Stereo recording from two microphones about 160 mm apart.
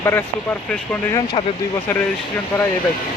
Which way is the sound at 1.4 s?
30° left (ahead or behind).